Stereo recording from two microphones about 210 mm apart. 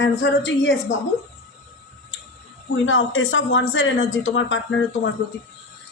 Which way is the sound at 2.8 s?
70° left (ahead or behind).